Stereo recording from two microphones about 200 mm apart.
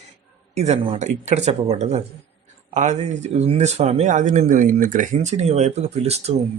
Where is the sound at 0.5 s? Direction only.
35° right (ahead or behind).